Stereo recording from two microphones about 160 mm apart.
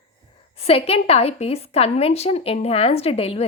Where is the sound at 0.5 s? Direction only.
40° left (ahead or behind).